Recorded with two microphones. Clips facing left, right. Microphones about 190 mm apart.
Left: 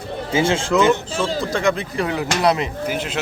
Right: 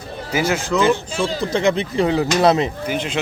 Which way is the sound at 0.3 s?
25° left (ahead or behind).